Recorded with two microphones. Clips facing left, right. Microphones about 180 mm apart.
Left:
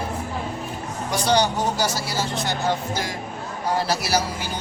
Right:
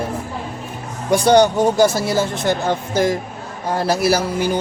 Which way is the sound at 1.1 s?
55° right (ahead or behind).